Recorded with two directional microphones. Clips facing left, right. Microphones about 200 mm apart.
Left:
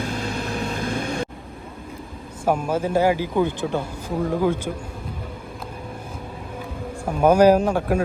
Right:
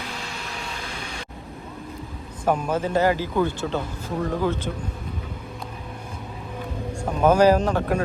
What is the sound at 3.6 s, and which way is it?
Speech, 5° left (ahead or behind).